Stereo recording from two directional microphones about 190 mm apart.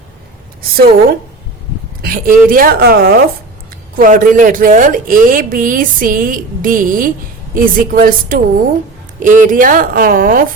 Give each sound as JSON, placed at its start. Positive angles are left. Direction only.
{"t": 2.0, "sound": "speech", "side_deg": -50}